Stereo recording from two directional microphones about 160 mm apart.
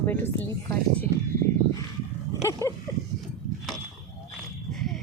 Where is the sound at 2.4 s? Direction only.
20° left (ahead or behind).